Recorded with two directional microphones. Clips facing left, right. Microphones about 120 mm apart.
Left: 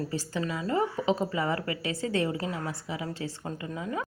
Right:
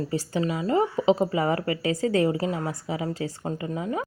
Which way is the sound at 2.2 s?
25° right (ahead or behind).